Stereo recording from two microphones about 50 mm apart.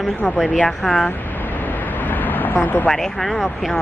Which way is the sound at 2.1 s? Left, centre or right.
Left.